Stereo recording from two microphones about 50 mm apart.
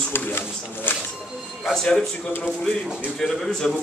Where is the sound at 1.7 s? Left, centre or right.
Centre.